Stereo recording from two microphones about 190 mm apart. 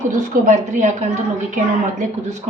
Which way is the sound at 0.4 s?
40° right (ahead or behind).